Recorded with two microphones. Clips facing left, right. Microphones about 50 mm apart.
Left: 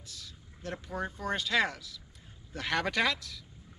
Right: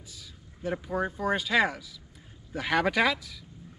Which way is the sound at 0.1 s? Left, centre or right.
Centre.